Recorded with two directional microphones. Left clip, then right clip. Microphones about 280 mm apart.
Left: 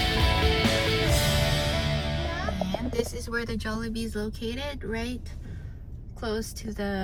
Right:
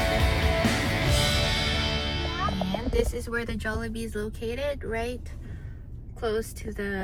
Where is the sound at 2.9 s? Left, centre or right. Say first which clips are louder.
Right 2 dB; centre.